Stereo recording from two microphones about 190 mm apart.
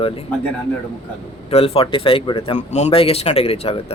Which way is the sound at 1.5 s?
30° left (ahead or behind).